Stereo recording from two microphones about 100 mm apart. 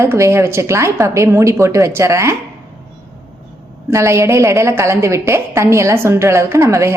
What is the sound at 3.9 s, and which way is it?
A woman's voice, 30° right (ahead or behind).